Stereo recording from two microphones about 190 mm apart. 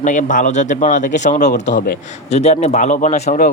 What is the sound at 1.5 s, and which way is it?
Speech, 60° left (ahead or behind).